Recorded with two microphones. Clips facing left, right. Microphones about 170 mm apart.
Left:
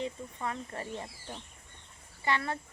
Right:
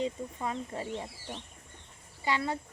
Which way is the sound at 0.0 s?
15° right (ahead or behind).